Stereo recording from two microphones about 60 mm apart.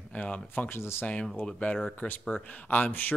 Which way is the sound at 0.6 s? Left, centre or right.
Left.